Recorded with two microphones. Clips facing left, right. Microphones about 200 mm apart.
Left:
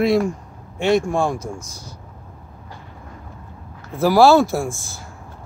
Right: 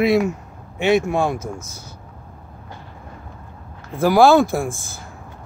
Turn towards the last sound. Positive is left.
turn(degrees=0)  # may be behind; listen again after turning